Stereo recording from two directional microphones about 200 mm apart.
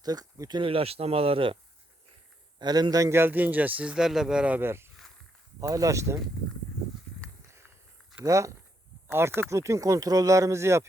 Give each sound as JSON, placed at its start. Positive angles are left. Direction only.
{"t": 0.0, "sound": "speech", "side_deg": -20}
{"t": 2.6, "sound": "speech", "side_deg": -20}
{"t": 8.2, "sound": "speech", "side_deg": -15}